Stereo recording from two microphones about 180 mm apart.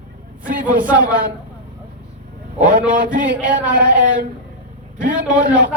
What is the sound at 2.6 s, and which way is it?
Speech, 50° right (ahead or behind).